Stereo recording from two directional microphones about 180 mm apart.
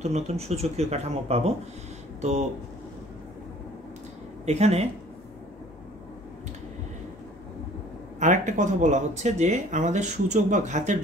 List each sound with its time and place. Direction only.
0.0 s speech: 35° right (ahead or behind)
4.5 s speech: 35° right (ahead or behind)
8.2 s speech: 40° right (ahead or behind)